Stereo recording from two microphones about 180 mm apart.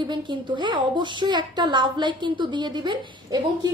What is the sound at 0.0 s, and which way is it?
A woman's voice, 25° right (ahead or behind).